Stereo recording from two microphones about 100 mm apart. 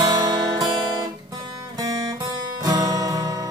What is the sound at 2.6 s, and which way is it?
Music, 40° right (ahead or behind).